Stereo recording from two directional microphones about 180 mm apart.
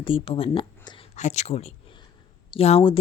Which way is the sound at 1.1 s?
40° left (ahead or behind).